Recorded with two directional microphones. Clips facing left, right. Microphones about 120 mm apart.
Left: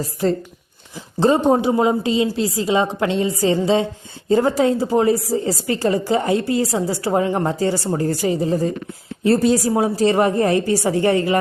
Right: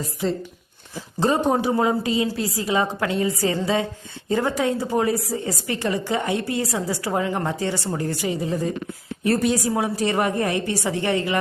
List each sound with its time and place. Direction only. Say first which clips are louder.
1.2 s a woman's voice: left 5 dB; 25° left (ahead or behind)